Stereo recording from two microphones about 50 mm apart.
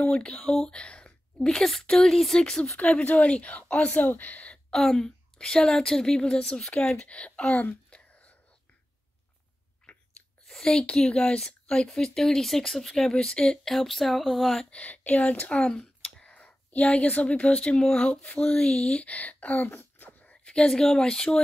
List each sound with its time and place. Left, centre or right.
0.0 s speech: left
2.8 s speech: left
4.7 s speech: centre
7.9 s whispering: left
10.4 s speech: centre
13.7 s speech: centre
14.9 s speech: left
15.7 s speech: centre; by 19.8 s left
20.0 s a sound: left
20.4 s speech: centre